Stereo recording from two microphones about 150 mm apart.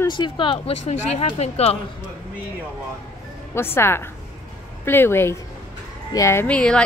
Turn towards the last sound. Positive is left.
turn(degrees=5)  # may be behind; listen again after turning